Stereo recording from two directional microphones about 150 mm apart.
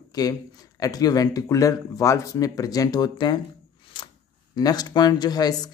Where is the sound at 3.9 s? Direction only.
30° left (ahead or behind).